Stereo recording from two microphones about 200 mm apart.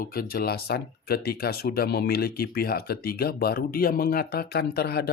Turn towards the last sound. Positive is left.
turn(degrees=50)  # may be behind; listen again after turning